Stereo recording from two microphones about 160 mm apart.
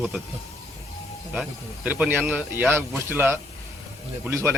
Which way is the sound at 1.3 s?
5° right (ahead or behind).